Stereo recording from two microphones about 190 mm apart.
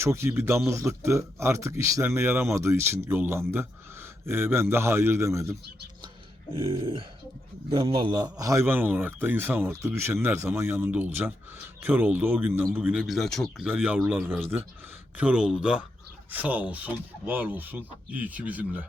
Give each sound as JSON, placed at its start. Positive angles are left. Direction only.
{"t": 0.0, "sound": "a man's voice", "side_deg": -15}
{"t": 6.5, "sound": "a sound", "side_deg": -30}
{"t": 7.7, "sound": "a man's voice", "side_deg": -25}